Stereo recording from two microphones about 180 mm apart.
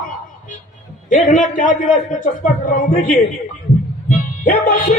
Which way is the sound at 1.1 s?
45° left (ahead or behind).